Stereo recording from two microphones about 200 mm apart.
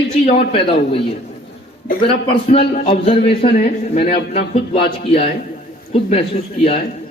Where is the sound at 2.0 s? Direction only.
25° left (ahead or behind).